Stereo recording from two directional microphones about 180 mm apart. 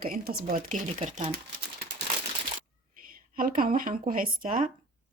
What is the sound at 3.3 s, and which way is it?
A woman's voice, 50° right (ahead or behind).